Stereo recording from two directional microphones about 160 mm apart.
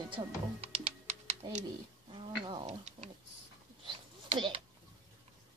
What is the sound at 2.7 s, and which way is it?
Tick-tock, 45° right (ahead or behind).